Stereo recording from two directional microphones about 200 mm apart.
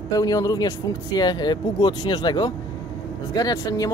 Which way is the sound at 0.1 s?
20° left (ahead or behind).